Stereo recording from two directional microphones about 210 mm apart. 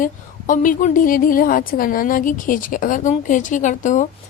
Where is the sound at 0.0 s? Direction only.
40° left (ahead or behind).